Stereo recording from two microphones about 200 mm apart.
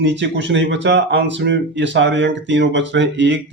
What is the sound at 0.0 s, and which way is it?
Speech, 60° right (ahead or behind).